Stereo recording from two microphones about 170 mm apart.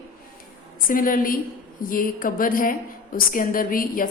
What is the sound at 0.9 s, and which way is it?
A woman's voice, 55° left (ahead or behind).